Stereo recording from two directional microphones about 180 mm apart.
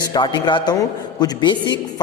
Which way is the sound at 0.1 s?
25° left (ahead or behind).